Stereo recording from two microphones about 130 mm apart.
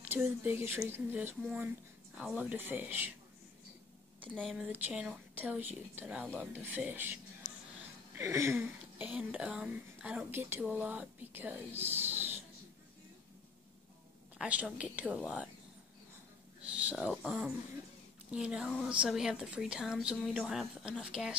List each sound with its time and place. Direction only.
0.0 s speech: 15° right (ahead or behind)
4.4 s speech: centre (ahead or behind)
8.2 s speech: 20° right (ahead or behind)
14.4 s speech: 10° right (ahead or behind)
16.6 s a sound: 10° right (ahead or behind)
17.1 s speech: 5° right (ahead or behind)